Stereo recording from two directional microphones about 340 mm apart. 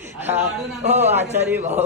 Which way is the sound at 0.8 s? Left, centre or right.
Centre.